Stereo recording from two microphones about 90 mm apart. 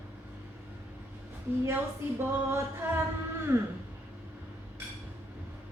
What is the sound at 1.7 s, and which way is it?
Speech, 25° right (ahead or behind).